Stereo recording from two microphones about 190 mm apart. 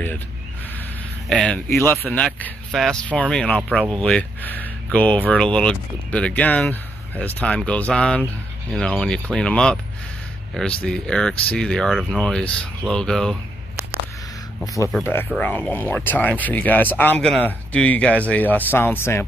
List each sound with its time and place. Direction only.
1.3 s speech: 5° left (ahead or behind)
10.8 s speech: 5° left (ahead or behind)
14.6 s speech: 15° left (ahead or behind)
15.3 s speech: 5° left (ahead or behind)